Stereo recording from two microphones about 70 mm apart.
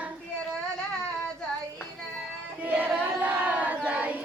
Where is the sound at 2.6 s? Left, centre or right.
Right.